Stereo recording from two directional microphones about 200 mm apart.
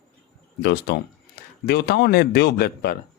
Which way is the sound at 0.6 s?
60° left (ahead or behind).